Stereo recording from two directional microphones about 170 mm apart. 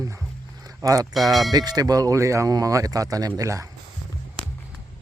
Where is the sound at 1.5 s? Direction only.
25° right (ahead or behind).